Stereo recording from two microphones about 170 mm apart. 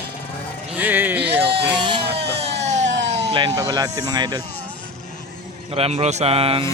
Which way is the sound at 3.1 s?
30° right (ahead or behind).